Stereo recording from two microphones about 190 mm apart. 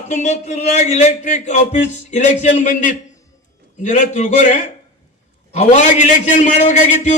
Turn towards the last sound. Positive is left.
turn(degrees=40)  # may be behind; listen again after turning